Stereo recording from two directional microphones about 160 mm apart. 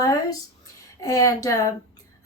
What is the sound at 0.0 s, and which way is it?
A woman's voice, 20° left (ahead or behind).